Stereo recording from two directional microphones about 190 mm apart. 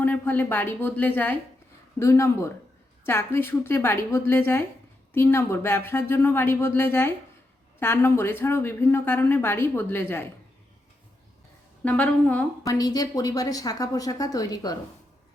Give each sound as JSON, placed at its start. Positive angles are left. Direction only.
{"t": 0.0, "sound": "speech", "side_deg": 10}
{"t": 11.9, "sound": "speech", "side_deg": 10}
{"t": 12.6, "sound": "speech", "side_deg": 20}